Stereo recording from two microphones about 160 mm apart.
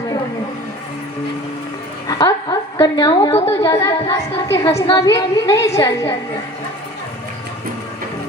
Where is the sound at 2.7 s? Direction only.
25° left (ahead or behind).